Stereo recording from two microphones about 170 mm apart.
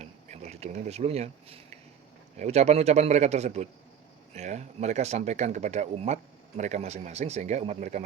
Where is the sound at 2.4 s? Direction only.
40° right (ahead or behind).